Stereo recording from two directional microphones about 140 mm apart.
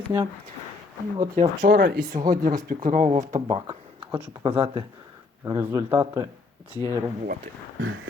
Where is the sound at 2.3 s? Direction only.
70° right (ahead or behind).